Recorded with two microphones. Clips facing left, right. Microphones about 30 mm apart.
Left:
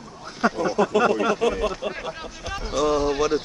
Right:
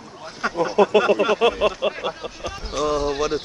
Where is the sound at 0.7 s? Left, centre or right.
Right.